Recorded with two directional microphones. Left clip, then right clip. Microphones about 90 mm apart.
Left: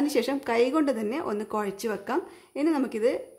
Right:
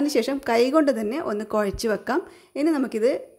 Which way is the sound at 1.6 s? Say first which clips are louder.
Right 6 dB; 55° right (ahead or behind).